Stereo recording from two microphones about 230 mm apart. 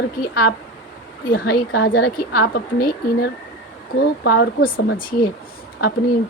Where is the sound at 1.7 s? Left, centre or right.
Left.